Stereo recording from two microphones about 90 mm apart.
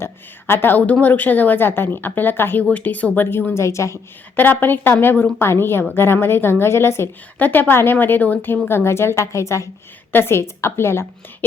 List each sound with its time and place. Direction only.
0.0 s a woman's voice: 25° left (ahead or behind)
4.4 s a woman's voice: 20° left (ahead or behind)